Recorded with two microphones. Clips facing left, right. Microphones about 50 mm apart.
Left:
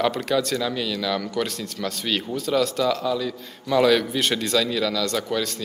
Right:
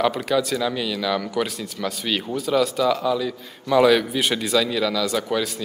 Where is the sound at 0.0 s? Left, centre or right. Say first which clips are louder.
Right 1 dB; centre.